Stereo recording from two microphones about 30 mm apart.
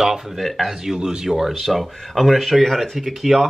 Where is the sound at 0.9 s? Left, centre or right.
Right.